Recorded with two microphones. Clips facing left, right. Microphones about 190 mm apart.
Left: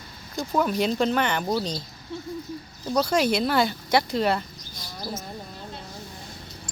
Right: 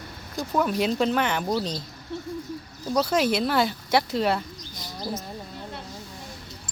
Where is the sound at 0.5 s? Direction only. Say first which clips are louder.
Even; centre (ahead or behind).